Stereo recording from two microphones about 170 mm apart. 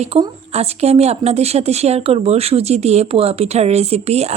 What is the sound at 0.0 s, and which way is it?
A woman's voice, 35° right (ahead or behind).